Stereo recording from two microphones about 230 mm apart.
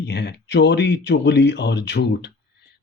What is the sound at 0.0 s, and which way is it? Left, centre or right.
Speech, left.